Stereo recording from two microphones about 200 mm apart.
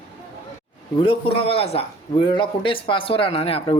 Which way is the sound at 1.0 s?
25° left (ahead or behind).